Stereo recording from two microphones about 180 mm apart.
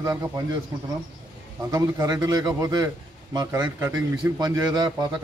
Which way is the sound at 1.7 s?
20° right (ahead or behind).